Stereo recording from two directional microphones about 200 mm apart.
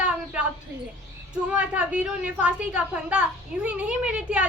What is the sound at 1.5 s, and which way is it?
A woman's voice, 5° right (ahead or behind).